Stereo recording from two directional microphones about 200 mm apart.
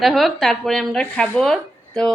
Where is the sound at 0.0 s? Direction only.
Centre (ahead or behind).